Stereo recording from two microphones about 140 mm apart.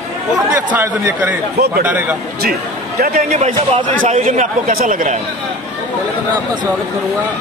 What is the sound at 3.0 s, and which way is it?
Speech, 90° right.